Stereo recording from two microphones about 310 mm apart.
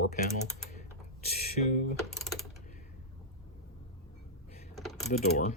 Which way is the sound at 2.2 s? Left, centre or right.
Centre.